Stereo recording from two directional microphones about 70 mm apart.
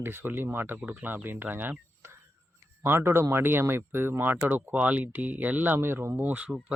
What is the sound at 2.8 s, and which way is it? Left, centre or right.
Speech, right.